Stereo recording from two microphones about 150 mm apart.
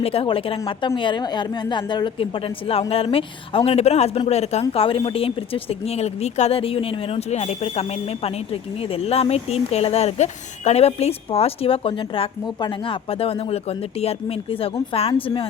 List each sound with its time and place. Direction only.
0.0 s speech: 40° left (ahead or behind)
14.6 s speech: 40° left (ahead or behind)